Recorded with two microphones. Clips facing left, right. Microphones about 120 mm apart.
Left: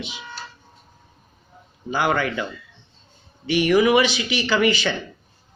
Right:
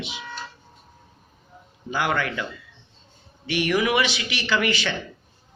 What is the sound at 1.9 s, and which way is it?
Speech, 35° left (ahead or behind).